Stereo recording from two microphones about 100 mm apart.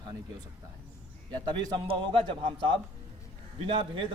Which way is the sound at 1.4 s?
50° right (ahead or behind).